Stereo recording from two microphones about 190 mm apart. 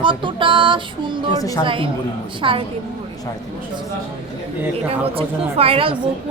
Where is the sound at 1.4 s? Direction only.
20° left (ahead or behind).